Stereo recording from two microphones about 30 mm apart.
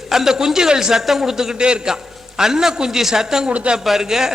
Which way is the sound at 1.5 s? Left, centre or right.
Right.